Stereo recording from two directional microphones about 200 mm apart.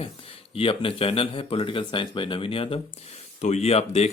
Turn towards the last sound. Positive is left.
turn(degrees=30)  # may be behind; listen again after turning